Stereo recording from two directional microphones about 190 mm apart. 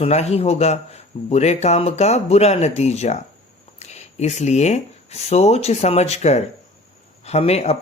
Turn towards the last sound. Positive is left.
turn(degrees=35)  # may be behind; listen again after turning